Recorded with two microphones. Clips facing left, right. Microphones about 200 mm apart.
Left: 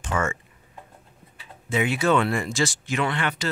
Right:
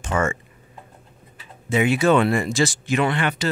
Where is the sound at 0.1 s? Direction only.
35° right (ahead or behind).